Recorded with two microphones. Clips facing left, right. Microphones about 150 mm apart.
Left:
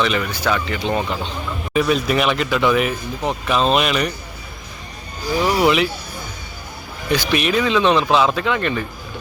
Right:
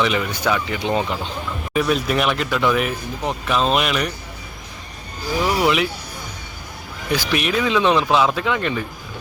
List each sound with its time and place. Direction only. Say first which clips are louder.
0.0 s speech: even; 15° right (ahead or behind)
1.7 s speech: left 2 dB; centre (ahead or behind)
5.5 s speech: left 2 dB; centre (ahead or behind)
7.1 s speech: left 2 dB; 5° right (ahead or behind)